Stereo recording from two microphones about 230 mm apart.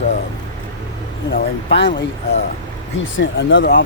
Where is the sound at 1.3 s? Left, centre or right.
Left.